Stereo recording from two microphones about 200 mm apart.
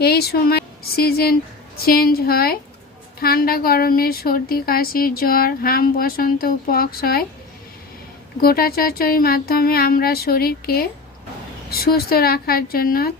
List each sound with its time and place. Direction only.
0.0 s a woman's voice: 50° left (ahead or behind)
8.4 s a woman's voice: 50° left (ahead or behind)